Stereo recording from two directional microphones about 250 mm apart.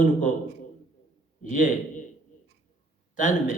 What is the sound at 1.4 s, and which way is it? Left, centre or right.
Speech, left.